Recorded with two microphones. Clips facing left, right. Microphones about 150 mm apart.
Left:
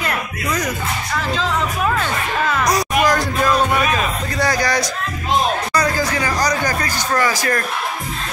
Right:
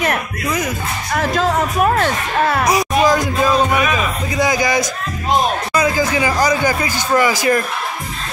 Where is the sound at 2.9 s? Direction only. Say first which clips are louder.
Right 3 dB; 20° right (ahead or behind).